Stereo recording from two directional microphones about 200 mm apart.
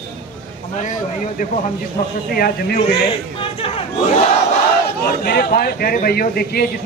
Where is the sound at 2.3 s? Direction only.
50° left (ahead or behind).